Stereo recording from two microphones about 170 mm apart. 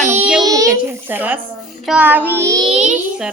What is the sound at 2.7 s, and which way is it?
Speech, 45° right (ahead or behind).